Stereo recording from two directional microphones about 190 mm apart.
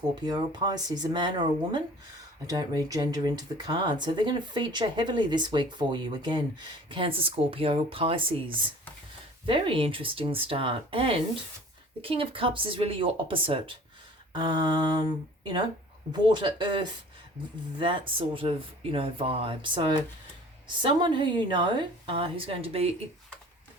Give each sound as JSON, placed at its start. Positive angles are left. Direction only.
{"t": 0.3, "sound": "speech", "side_deg": -20}
{"t": 16.1, "sound": "speech", "side_deg": -25}